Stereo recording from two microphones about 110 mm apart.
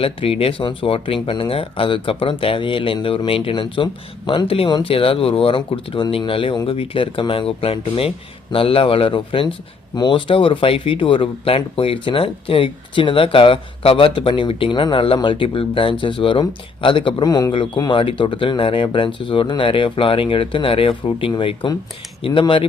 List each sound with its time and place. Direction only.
0.0 s speech: 55° left (ahead or behind)
17.2 s speech: 35° left (ahead or behind)